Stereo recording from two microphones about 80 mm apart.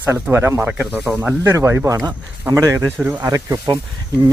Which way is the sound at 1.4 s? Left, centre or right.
Right.